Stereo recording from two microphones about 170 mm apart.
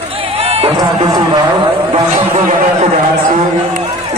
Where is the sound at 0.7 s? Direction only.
25° right (ahead or behind).